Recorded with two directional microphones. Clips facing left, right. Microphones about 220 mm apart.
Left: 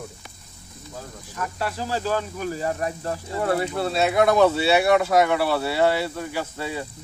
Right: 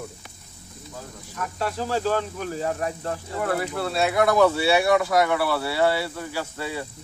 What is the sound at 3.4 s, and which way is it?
Speech, 25° left (ahead or behind).